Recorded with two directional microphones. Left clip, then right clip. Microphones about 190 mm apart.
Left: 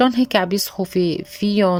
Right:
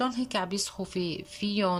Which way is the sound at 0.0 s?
40° left (ahead or behind).